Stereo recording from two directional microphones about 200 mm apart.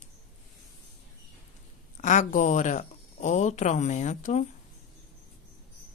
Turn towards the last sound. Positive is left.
turn(degrees=35)  # may be behind; listen again after turning